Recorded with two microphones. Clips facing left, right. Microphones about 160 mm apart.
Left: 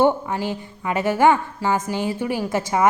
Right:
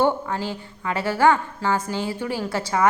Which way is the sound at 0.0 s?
15° left (ahead or behind).